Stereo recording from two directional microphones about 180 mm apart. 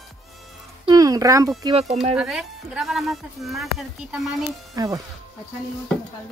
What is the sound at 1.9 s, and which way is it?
Speech, 35° right (ahead or behind).